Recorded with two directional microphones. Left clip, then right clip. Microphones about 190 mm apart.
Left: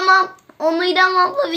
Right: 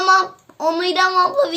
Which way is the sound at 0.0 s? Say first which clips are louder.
Left 1 dB; 25° right (ahead or behind).